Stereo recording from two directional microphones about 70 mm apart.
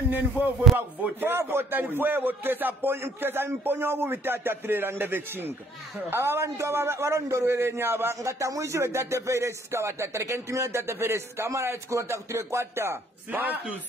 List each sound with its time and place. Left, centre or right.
0.7 s speech: right
8.2 s speech: right